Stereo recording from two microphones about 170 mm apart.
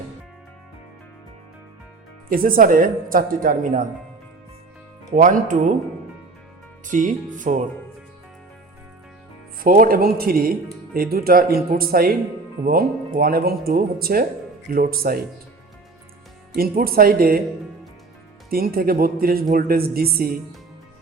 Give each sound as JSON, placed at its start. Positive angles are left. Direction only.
{"t": 2.3, "sound": "speech", "side_deg": -55}
{"t": 5.1, "sound": "music", "side_deg": -50}
{"t": 6.8, "sound": "music", "side_deg": -50}
{"t": 9.6, "sound": "speech", "side_deg": -55}
{"t": 16.6, "sound": "speech", "side_deg": -60}
{"t": 18.5, "sound": "speech", "side_deg": -60}